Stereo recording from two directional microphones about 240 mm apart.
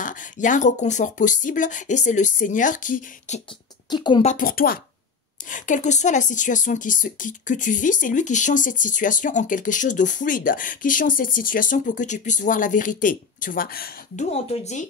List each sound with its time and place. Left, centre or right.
0.0 s speech: left
3.9 s a woman's voice: centre; by 14.2 s left
14.3 s a woman's voice: left